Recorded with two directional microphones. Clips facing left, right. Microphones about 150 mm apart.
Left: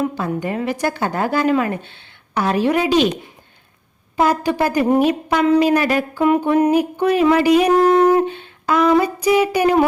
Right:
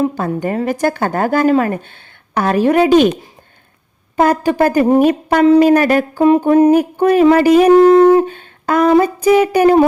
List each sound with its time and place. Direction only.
0.2 s a woman's voice: 45° right (ahead or behind)
7.8 s a sound: 30° right (ahead or behind)
8.3 s music: 45° right (ahead or behind)
9.0 s a woman's voice: 45° right (ahead or behind)